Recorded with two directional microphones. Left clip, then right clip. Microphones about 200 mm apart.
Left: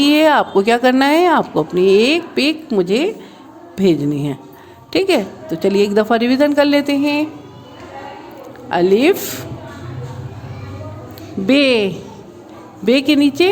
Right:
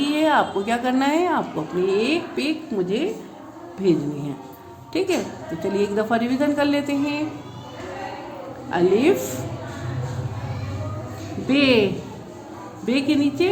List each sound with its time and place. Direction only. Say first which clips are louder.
0.0 s speech: left 7 dB; 50° left (ahead or behind)
8.7 s speech: left 5 dB; 50° left (ahead or behind)
11.4 s speech: left 5 dB; 50° left (ahead or behind)